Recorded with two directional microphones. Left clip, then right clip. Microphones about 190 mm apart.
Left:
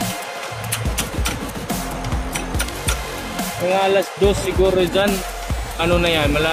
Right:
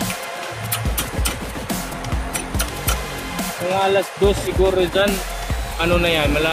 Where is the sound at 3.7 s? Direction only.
15° left (ahead or behind).